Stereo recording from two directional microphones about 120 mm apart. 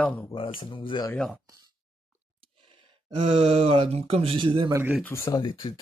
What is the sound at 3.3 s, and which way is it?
Speech, 55° right (ahead or behind).